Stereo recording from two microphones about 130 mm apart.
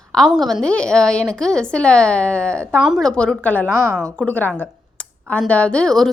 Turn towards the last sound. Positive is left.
turn(degrees=5)  # may be behind; listen again after turning